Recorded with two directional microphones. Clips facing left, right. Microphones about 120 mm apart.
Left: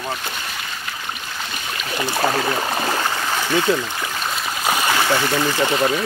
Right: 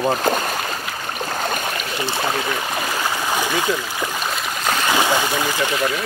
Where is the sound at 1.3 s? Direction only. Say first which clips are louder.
Right 7 dB; 50° right (ahead or behind).